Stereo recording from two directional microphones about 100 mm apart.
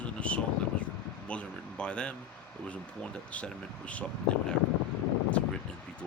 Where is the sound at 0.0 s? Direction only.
15° left (ahead or behind).